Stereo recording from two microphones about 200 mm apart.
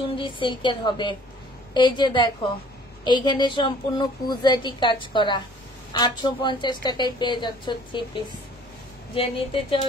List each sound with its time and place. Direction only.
0.1 s a woman's voice: 25° left (ahead or behind)